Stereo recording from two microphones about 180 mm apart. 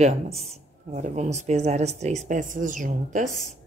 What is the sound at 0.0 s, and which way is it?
Speech, 35° right (ahead or behind).